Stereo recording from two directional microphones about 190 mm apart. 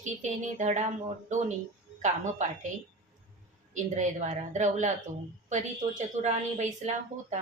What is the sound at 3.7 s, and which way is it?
Speech, 40° right (ahead or behind).